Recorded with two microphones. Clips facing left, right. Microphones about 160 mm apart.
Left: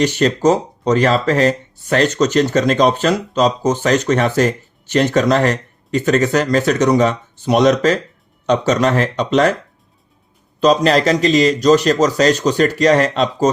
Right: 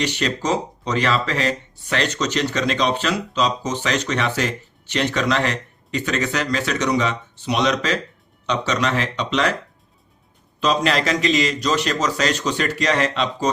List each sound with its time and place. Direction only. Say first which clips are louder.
0.0 s speech: left 9 dB; 45° left (ahead or behind)
10.6 s speech: left 7 dB; 40° left (ahead or behind)